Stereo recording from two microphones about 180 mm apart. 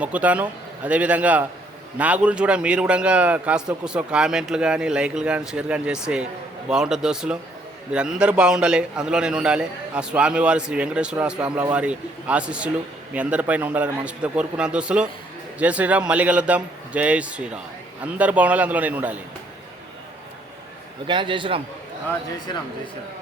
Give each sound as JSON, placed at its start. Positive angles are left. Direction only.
{"t": 0.0, "sound": "a man's voice", "side_deg": -10}
{"t": 21.1, "sound": "a man's voice", "side_deg": -25}